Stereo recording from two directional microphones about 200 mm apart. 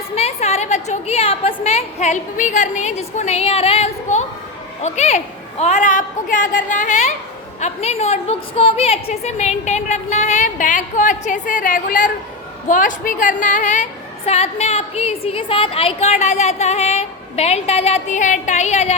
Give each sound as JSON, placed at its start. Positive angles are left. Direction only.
{"t": 0.2, "sound": "a woman's voice", "side_deg": 30}